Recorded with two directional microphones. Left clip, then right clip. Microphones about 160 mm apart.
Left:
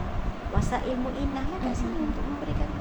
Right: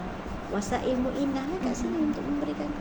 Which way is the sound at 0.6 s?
45° right (ahead or behind).